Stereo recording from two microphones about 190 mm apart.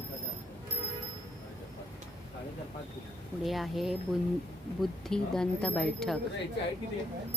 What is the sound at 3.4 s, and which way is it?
Speech, centre (ahead or behind).